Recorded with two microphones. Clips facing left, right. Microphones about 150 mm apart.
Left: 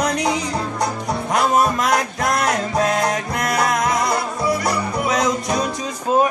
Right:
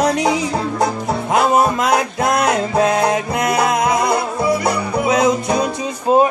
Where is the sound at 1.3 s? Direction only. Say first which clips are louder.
Right 3 dB; 20° right (ahead or behind).